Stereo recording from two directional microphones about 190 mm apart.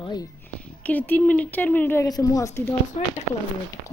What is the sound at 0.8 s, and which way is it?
Speech, 10° left (ahead or behind).